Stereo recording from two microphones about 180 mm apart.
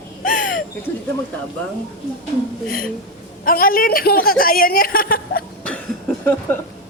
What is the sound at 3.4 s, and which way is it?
A woman's voice, 55° left (ahead or behind).